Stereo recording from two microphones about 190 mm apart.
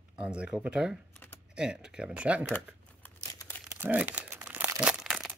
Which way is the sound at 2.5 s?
10° left (ahead or behind).